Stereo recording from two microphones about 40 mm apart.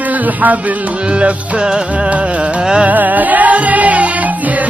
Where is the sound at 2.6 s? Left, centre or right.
Centre.